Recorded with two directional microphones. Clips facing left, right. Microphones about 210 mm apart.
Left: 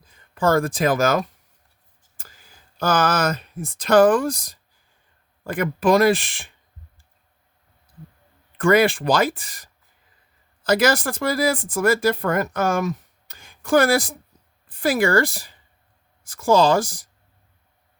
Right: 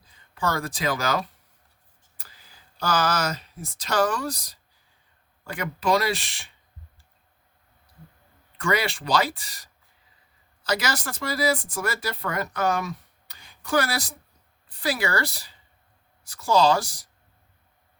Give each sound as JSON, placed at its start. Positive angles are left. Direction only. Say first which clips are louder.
{"t": 0.0, "sound": "speech", "louder": "left 7 dB", "side_deg": 50}
{"t": 8.5, "sound": "speech", "louder": "left 9 dB", "side_deg": 50}